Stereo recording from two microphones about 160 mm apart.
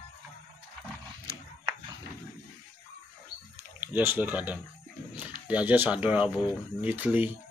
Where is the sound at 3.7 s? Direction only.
10° right (ahead or behind).